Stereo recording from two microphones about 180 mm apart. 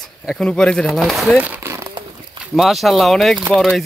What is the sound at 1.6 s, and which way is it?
Crumpling, 15° right (ahead or behind).